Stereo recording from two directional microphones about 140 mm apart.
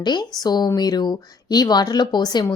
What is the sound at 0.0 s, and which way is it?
A woman's voice, 30° left (ahead or behind).